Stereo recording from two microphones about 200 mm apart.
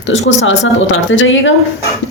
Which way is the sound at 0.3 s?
70° left (ahead or behind).